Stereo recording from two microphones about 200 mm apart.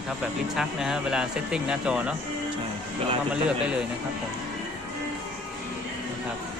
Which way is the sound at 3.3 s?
5° right (ahead or behind).